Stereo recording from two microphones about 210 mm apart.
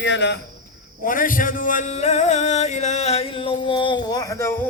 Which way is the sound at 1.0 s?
40° left (ahead or behind).